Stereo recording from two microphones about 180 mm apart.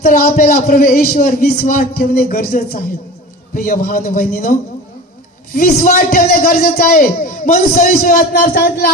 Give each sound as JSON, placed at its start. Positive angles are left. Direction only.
{"t": 0.1, "sound": "a man's voice", "side_deg": 45}
{"t": 5.5, "sound": "a man's voice", "side_deg": 45}